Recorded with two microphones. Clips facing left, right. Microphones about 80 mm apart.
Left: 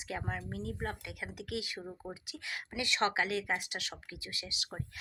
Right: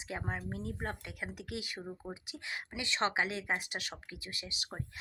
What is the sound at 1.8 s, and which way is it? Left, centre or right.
Speech, centre.